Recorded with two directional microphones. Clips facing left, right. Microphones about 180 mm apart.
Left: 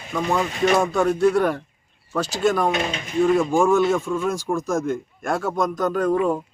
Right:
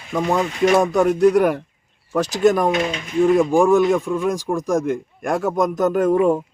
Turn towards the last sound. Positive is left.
turn(degrees=-25)  # may be behind; listen again after turning